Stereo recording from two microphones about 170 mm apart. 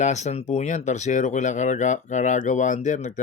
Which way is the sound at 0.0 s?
45° left (ahead or behind).